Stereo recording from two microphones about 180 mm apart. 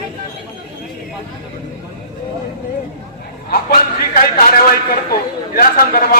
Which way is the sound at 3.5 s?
55° left (ahead or behind).